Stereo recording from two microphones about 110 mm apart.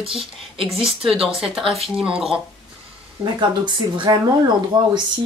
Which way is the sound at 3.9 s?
40° right (ahead or behind).